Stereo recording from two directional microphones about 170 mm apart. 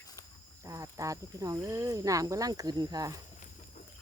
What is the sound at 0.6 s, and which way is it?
Speech, 20° right (ahead or behind).